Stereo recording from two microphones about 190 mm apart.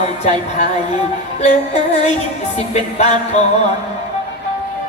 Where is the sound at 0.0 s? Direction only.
35° left (ahead or behind).